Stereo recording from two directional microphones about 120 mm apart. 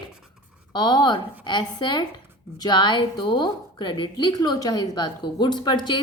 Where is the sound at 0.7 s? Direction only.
35° left (ahead or behind).